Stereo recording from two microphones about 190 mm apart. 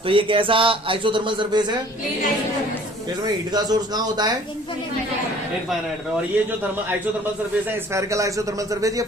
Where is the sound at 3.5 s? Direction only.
20° right (ahead or behind).